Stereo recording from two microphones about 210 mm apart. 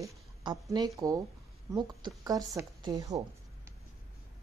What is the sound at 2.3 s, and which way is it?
Speech, 15° right (ahead or behind).